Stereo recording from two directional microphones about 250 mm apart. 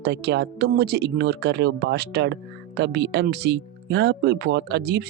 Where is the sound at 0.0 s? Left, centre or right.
Right.